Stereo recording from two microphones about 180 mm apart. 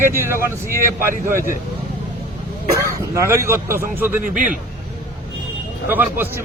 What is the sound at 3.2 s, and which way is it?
A man's voice, 15° right (ahead or behind).